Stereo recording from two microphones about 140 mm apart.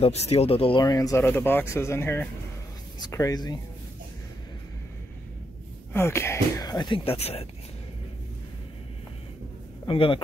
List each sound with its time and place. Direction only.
0.0 s speech: 50° left (ahead or behind)
0.8 s speech: 25° left (ahead or behind)
1.2 s speech: 15° left (ahead or behind)
5.9 s speech: 15° left (ahead or behind); by 7.4 s 45° left (ahead or behind)
9.8 s speech: 40° left (ahead or behind)